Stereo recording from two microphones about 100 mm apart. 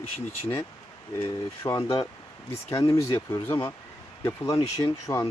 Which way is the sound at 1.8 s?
35° left (ahead or behind).